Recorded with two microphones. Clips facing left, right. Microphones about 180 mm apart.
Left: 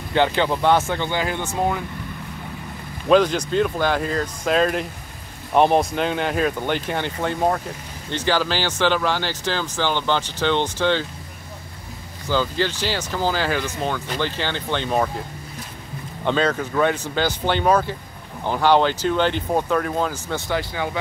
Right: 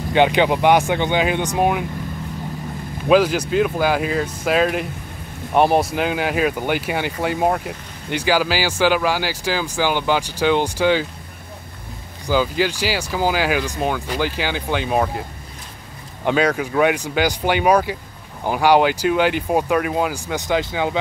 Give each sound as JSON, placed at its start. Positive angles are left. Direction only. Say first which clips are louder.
{"t": 0.1, "sound": "speech", "louder": "right 4 dB", "side_deg": -15}
{"t": 3.1, "sound": "speech", "louder": "right 1 dB", "side_deg": -5}
{"t": 12.3, "sound": "speech", "louder": "right 3 dB", "side_deg": -10}
{"t": 16.3, "sound": "speech", "louder": "right 2 dB", "side_deg": -10}